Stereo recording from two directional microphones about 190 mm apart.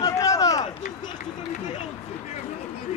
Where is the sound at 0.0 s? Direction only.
20° left (ahead or behind).